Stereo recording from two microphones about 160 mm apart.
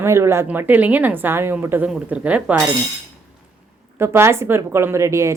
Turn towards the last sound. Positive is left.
turn(degrees=-20)  # may be behind; listen again after turning